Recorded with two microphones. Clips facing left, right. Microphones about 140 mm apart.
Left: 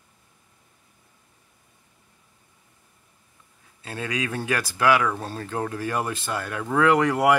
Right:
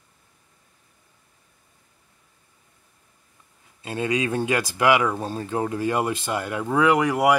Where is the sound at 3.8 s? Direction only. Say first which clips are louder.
Right 5 dB; 20° right (ahead or behind).